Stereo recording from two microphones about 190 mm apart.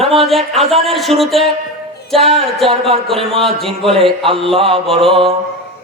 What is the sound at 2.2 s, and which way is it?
Mantra, 30° right (ahead or behind).